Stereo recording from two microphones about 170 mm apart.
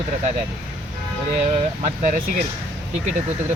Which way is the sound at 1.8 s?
50° right (ahead or behind).